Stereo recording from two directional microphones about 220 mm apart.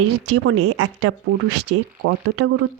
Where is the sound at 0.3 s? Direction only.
75° right (ahead or behind).